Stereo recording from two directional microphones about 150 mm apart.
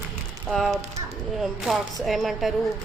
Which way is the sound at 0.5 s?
Centre (ahead or behind).